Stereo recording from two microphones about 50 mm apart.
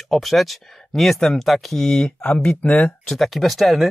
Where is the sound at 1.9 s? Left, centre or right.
Centre.